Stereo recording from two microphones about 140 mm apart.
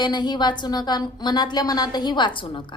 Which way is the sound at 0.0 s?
30° left (ahead or behind).